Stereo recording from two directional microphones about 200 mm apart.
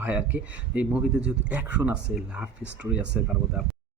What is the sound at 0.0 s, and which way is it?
Speech, 10° right (ahead or behind).